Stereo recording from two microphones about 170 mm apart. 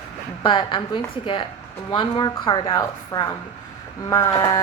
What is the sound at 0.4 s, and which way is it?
A woman's voice, 30° left (ahead or behind).